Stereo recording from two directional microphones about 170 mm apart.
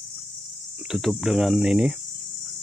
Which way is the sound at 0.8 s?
Centre (ahead or behind).